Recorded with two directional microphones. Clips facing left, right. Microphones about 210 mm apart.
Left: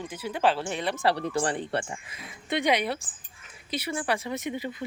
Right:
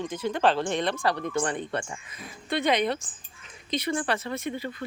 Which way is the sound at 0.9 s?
30° left (ahead or behind).